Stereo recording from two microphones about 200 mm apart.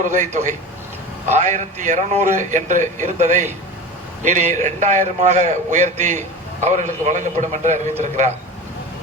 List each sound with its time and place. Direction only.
0.0 s speech: 40° right (ahead or behind)